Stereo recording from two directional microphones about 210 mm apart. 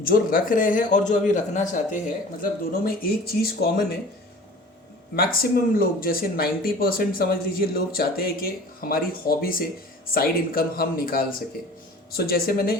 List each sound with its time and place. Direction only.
0.0 s speech: 40° left (ahead or behind)
5.1 s speech: 45° left (ahead or behind)